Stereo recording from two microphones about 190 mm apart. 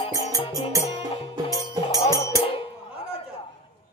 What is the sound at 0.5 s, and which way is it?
Music, 20° right (ahead or behind).